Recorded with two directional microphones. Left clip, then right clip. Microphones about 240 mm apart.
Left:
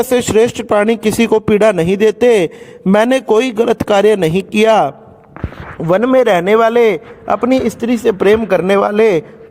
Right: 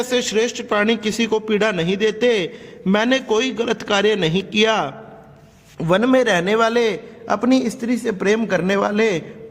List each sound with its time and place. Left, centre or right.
0.0 s speech: left
5.8 s speech: centre
6.5 s a man's voice: left
7.8 s speech: centre
8.3 s a man's voice: left